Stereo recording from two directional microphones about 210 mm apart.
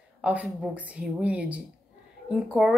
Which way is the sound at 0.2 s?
5° right (ahead or behind).